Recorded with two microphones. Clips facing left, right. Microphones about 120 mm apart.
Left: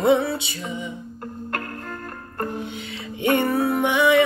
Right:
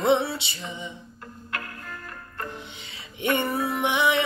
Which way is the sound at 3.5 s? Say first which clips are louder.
Left 6 dB; 60° left (ahead or behind).